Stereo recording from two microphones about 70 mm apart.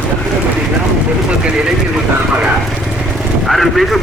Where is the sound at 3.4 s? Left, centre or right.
Centre.